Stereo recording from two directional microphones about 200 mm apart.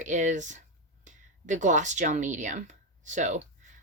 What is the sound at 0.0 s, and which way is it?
Speech, 40° right (ahead or behind).